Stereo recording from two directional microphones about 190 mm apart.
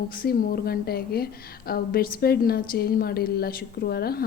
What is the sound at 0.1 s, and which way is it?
A woman's voice, 50° left (ahead or behind).